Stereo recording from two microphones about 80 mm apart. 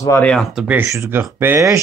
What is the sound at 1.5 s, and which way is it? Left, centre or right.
Speech, right.